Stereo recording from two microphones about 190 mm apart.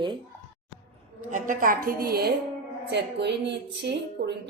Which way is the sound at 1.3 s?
45° right (ahead or behind).